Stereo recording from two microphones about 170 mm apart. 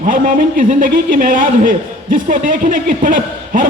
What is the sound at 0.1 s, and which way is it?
Speech, 55° right (ahead or behind).